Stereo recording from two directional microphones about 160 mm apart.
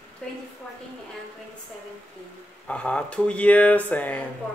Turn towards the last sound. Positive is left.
turn(degrees=10)  # may be behind; listen again after turning